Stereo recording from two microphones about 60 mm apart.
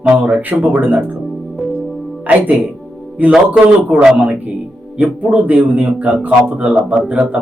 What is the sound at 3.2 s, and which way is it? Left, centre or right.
Speech, right.